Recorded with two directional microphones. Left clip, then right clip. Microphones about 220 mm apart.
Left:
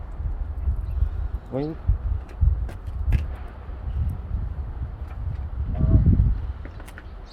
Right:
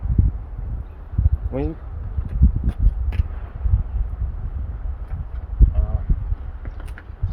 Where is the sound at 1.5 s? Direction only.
15° right (ahead or behind).